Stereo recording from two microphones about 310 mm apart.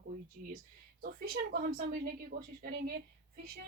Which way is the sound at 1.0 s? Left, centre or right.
Right.